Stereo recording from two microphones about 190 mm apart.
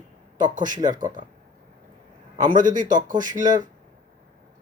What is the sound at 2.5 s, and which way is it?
A man's voice, 45° right (ahead or behind).